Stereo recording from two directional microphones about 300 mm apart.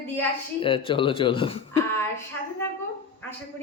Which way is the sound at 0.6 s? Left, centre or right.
Centre.